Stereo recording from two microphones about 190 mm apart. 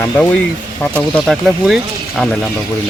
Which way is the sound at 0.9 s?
Centre (ahead or behind).